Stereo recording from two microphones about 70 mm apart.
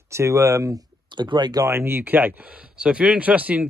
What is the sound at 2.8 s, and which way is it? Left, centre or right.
Speech, centre.